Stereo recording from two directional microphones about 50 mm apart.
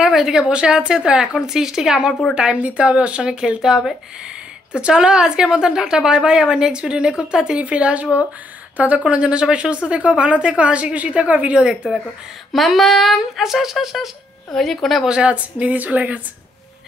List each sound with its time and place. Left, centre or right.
0.0 s a woman's voice: centre
12.5 s speech: centre
14.5 s speech: centre
15.0 s speech: right